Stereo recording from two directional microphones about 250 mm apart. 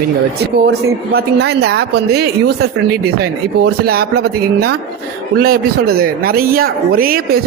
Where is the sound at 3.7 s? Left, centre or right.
Right.